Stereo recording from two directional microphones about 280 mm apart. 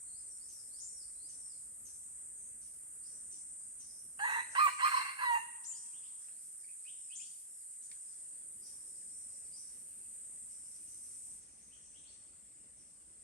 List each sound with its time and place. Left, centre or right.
4.2 s chicken: centre